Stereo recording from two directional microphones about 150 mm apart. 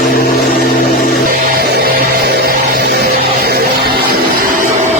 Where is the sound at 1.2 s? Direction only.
80° right.